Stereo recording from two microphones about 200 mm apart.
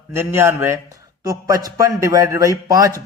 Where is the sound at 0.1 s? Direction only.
10° right (ahead or behind).